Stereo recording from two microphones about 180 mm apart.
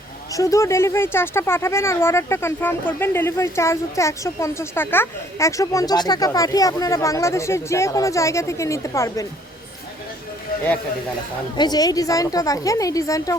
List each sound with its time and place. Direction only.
0.3 s speech: 15° left (ahead or behind)
11.5 s a woman's voice: 25° left (ahead or behind)